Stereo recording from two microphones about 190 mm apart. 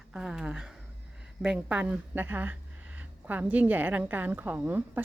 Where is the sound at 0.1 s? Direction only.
5° right (ahead or behind).